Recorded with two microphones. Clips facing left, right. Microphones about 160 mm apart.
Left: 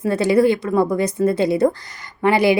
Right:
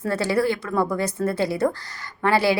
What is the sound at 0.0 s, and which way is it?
A woman's voice, 20° left (ahead or behind).